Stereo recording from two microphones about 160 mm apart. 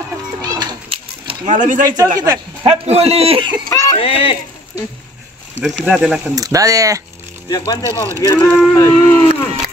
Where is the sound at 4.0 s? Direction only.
35° left (ahead or behind).